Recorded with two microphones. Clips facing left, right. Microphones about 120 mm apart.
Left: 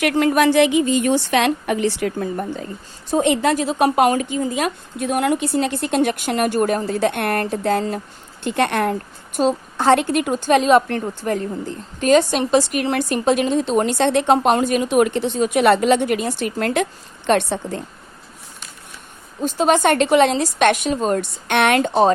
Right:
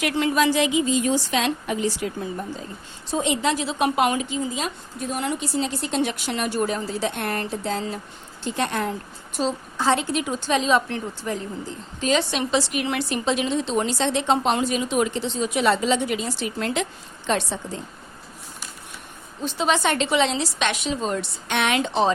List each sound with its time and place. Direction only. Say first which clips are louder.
0.0 s a woman's voice: left 5 dB; 50° left (ahead or behind)
19.4 s a woman's voice: left 6 dB; 45° left (ahead or behind)